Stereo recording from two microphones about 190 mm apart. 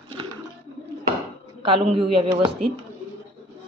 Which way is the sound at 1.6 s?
30° right (ahead or behind).